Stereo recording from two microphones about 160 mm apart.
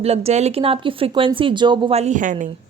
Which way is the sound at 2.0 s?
50° right (ahead or behind).